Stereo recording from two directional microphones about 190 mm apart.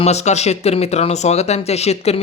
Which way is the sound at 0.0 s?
35° left (ahead or behind).